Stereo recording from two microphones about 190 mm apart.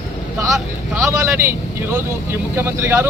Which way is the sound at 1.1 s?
15° right (ahead or behind).